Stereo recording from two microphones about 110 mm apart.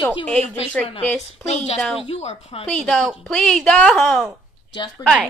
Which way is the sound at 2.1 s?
75° left (ahead or behind).